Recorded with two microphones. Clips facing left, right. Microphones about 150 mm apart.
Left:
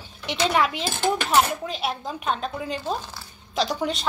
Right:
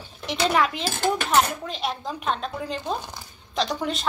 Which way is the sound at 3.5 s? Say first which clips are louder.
Left 1 dB; centre (ahead or behind).